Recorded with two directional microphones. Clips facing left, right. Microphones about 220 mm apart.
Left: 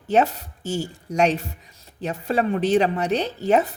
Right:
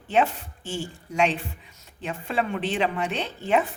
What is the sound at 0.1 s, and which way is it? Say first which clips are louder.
A woman's voice: left 3 dB; 40° left (ahead or behind).